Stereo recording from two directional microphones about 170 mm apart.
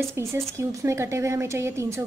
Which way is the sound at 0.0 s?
15° right (ahead or behind).